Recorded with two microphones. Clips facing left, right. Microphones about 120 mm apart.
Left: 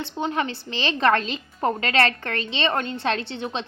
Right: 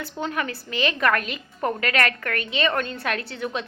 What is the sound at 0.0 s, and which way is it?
A woman's voice, 25° left (ahead or behind).